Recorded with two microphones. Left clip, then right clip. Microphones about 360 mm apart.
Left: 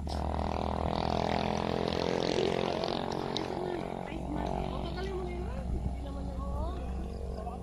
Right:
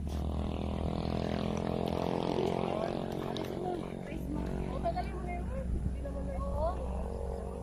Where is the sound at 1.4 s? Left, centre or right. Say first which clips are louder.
Left 3 dB; left.